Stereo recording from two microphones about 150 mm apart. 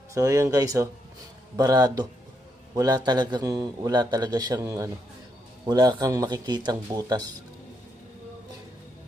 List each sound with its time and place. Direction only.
0.1 s a man's voice: 20° right (ahead or behind)